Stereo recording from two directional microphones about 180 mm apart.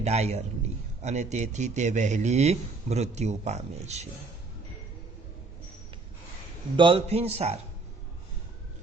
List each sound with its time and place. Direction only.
0.0 s a man's voice: 35° right (ahead or behind)
6.7 s a man's voice: 30° right (ahead or behind)